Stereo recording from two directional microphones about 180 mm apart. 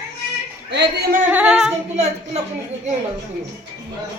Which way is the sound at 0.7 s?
70° right (ahead or behind).